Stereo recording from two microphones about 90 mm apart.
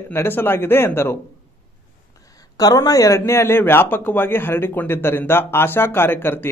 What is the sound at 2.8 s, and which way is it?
Speech, 40° left (ahead or behind).